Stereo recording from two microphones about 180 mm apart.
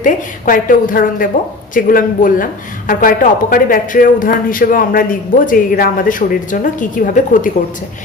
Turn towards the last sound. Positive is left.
turn(degrees=45)  # may be behind; listen again after turning